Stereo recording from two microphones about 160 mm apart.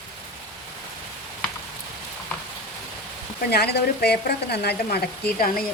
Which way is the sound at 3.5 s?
90° left.